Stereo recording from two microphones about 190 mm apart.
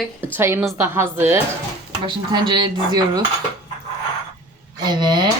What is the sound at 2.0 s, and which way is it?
Speech, 25° right (ahead or behind).